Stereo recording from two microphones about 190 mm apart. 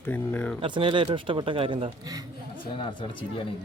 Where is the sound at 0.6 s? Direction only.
25° right (ahead or behind).